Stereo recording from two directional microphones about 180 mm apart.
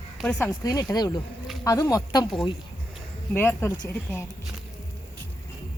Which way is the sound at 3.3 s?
10° left (ahead or behind).